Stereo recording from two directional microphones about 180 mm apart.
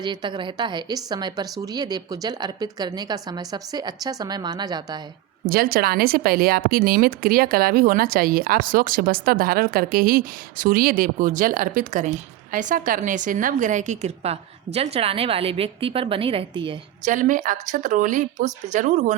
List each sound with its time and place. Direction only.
0.0 s speech: 25° right (ahead or behind)
5.5 s a woman's voice: 55° right (ahead or behind); by 16.7 s 30° right (ahead or behind)
17.1 s a woman's voice: 45° right (ahead or behind)